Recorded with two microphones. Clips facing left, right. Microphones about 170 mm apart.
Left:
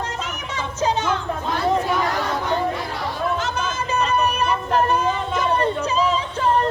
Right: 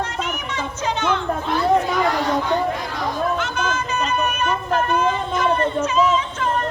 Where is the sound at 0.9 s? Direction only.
40° left (ahead or behind).